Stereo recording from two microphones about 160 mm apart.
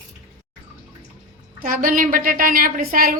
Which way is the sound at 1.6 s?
60° right (ahead or behind).